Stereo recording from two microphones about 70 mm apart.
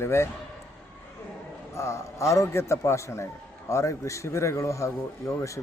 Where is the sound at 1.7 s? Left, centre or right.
Left.